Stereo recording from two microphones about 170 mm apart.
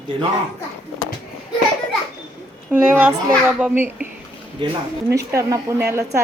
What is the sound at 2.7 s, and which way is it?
A woman's voice, 5° right (ahead or behind).